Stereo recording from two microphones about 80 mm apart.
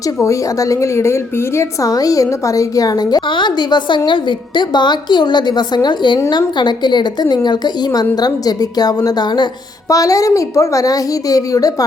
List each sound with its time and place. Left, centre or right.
0.3 s a woman's voice: left
1.9 s a woman's voice: left
9.9 s a woman's voice: left